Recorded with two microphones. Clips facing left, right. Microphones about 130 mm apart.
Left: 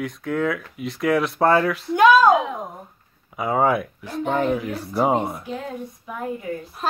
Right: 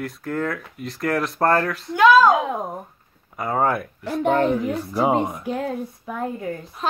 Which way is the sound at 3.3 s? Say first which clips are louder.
Left 2 dB; 5° left (ahead or behind).